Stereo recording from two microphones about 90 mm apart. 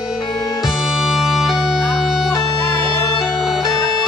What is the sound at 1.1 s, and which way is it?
Music, 5° right (ahead or behind).